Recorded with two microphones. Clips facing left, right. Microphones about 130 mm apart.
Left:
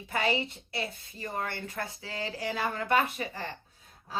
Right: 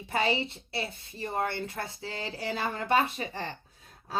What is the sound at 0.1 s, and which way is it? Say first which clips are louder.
A woman's voice: right 1 dB; 30° right (ahead or behind).